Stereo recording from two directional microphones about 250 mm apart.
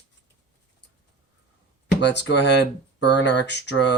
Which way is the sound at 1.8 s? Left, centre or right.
Left.